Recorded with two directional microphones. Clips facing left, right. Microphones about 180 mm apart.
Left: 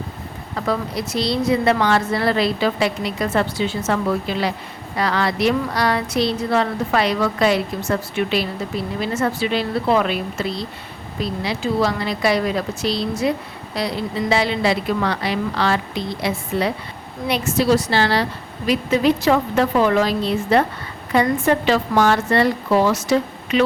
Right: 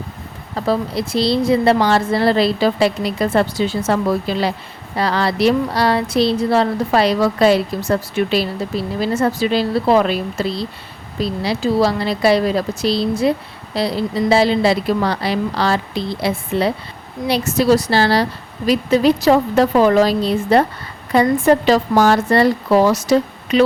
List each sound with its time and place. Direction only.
0.5 s speech: 30° right (ahead or behind)